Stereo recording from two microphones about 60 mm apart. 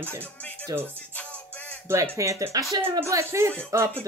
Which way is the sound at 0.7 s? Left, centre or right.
Right.